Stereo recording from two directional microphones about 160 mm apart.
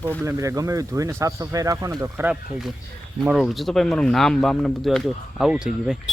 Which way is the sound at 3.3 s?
Centre (ahead or behind).